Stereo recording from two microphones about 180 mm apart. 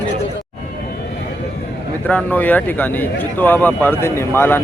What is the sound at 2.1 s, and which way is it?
Speech, 10° left (ahead or behind).